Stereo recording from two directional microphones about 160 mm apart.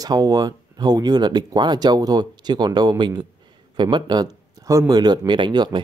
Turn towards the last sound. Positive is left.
turn(degrees=-30)  # may be behind; listen again after turning